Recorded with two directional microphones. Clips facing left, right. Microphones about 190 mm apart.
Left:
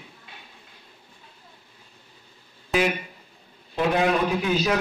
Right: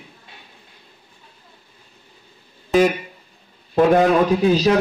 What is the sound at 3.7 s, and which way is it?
Speech, 45° right (ahead or behind).